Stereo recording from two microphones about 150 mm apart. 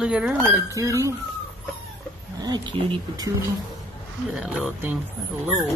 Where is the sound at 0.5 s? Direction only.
20° right (ahead or behind).